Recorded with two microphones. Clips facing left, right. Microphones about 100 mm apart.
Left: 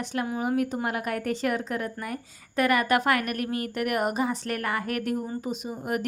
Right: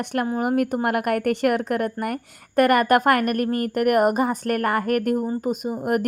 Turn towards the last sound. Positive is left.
turn(degrees=-50)  # may be behind; listen again after turning